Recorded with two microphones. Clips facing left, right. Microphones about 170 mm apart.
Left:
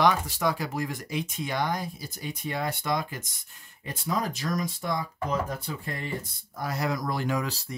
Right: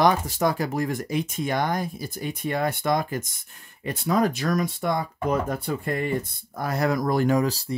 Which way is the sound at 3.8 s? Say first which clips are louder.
Right 7 dB; 65° right (ahead or behind).